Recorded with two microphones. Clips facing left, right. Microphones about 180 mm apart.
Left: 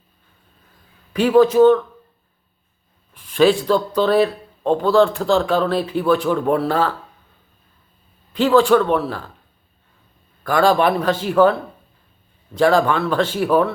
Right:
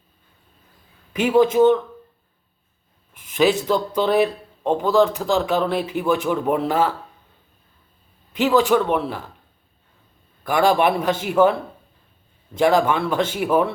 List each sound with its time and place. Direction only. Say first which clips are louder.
1.4 s speech: left 3 dB; 20° right (ahead or behind)
3.3 s speech: left 3 dB; 20° right (ahead or behind)
8.4 s speech: left 3 dB; 15° right (ahead or behind)
10.4 s speech: left 2 dB; 20° right (ahead or behind)
12.5 s speech: left 2 dB; 20° right (ahead or behind)